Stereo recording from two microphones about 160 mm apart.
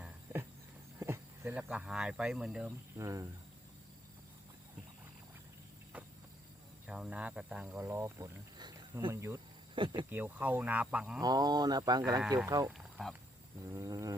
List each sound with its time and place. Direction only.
0.9 s speech: 15° right (ahead or behind)
3.0 s speech: 20° right (ahead or behind)
6.8 s speech: 5° right (ahead or behind)
8.5 s cricket: 25° right (ahead or behind)
9.7 s speech: 30° right (ahead or behind)
10.1 s speech: 10° right (ahead or behind)
11.2 s speech: 25° right (ahead or behind)
12.7 s a sound: centre (ahead or behind)
13.7 s speech: 20° right (ahead or behind)